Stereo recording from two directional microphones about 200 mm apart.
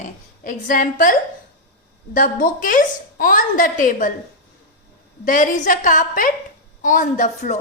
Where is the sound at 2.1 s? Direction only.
45° left (ahead or behind).